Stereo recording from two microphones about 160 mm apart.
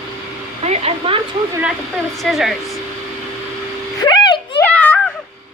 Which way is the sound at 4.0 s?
25° left (ahead or behind).